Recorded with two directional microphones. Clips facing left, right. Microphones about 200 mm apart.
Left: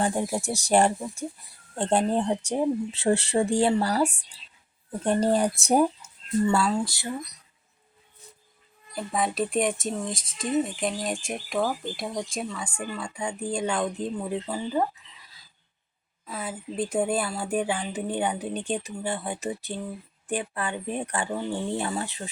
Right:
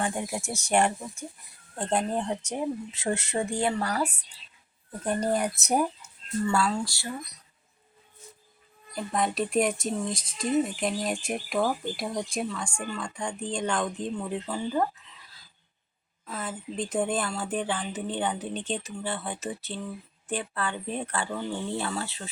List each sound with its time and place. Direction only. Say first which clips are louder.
0.0 s speech: left 4 dB; 35° left (ahead or behind); by 7.1 s 20° left (ahead or behind)
9.0 s speech: left 1 dB; centre (ahead or behind)
16.2 s speech: left 1 dB; 5° left (ahead or behind)